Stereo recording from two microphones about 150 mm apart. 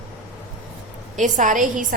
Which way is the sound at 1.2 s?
55° right (ahead or behind).